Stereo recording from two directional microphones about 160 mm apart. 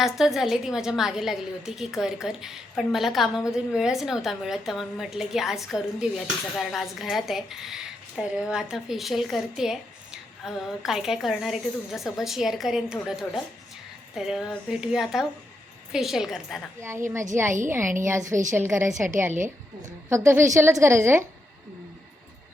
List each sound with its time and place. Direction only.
0.0 s a woman's voice: centre (ahead or behind)
17.7 s a woman's voice: 15° right (ahead or behind)
19.3 s a woman's voice: 50° right (ahead or behind)
20.1 s a woman's voice: 15° right (ahead or behind)